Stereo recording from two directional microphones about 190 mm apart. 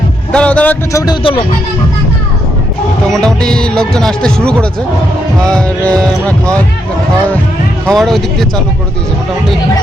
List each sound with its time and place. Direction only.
0.3 s speech: 5° left (ahead or behind)
1.0 s speech: 30° left (ahead or behind)
3.1 s speech: 5° left (ahead or behind)
7.9 s speech: centre (ahead or behind)